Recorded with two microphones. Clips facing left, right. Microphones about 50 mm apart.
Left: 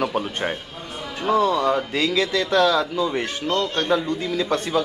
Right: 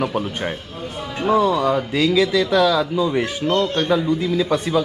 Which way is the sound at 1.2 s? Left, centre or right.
Centre.